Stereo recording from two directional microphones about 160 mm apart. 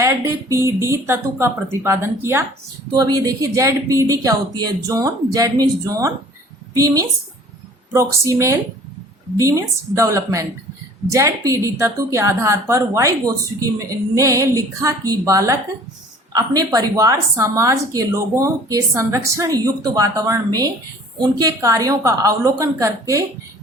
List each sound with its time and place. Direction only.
0.0 s speech: 20° right (ahead or behind)